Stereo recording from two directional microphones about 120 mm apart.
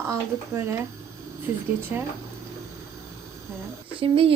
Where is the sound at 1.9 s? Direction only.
15° right (ahead or behind).